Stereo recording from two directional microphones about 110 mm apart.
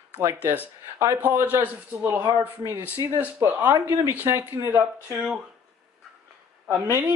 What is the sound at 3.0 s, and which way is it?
Speech, 30° right (ahead or behind).